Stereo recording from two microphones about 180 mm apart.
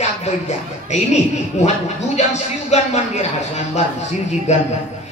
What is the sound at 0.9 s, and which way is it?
Speech, 40° left (ahead or behind).